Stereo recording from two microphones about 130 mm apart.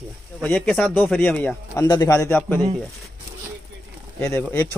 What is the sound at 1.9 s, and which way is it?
Speech, 25° left (ahead or behind).